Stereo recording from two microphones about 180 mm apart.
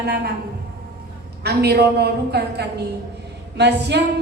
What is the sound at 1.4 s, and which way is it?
A woman's voice, 65° right (ahead or behind).